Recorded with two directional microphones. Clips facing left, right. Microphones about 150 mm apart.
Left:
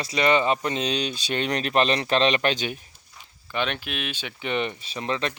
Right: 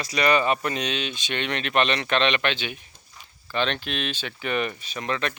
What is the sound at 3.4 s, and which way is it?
Speech, 10° left (ahead or behind).